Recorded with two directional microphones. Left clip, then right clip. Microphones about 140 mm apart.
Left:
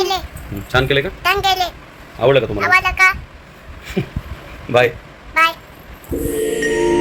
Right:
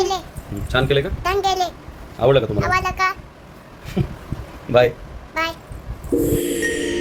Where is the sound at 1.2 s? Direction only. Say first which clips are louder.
Left 4 dB; 10° right (ahead or behind).